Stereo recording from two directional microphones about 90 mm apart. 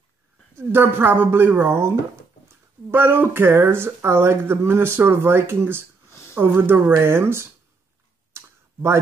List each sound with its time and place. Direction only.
0.6 s speech: 25° right (ahead or behind)
6.0 s a sound: 30° left (ahead or behind)
6.3 s speech: 20° right (ahead or behind)
8.3 s clicking: 30° right (ahead or behind)